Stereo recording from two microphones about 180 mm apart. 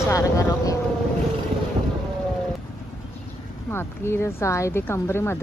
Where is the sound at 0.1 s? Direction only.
15° left (ahead or behind).